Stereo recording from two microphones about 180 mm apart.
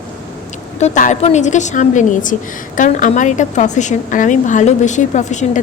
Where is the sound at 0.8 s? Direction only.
40° left (ahead or behind).